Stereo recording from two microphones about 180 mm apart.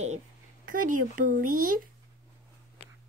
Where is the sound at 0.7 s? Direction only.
50° right (ahead or behind).